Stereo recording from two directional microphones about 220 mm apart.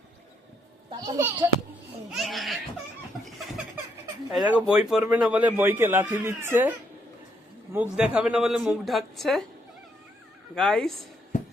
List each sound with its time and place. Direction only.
0.9 s a child's voice: 15° right (ahead or behind)
2.0 s speech: centre (ahead or behind)
10.5 s speech: centre (ahead or behind)